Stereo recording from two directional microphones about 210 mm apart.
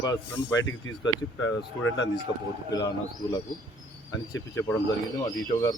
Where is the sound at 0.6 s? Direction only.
65° left (ahead or behind).